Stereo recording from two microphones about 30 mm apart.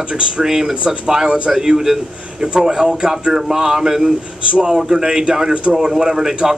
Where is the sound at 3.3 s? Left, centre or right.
Centre.